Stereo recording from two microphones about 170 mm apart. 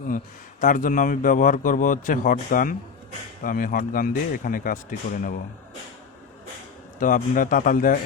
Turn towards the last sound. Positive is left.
turn(degrees=50)  # may be behind; listen again after turning